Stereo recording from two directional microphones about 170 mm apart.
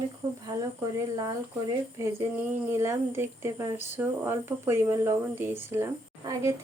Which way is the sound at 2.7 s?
15° right (ahead or behind).